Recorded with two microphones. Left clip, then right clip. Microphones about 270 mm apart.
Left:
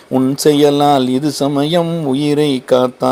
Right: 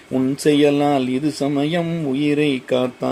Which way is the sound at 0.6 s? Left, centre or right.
Centre.